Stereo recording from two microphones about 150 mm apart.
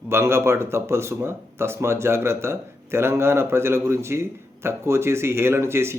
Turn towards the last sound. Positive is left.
turn(degrees=-15)  # may be behind; listen again after turning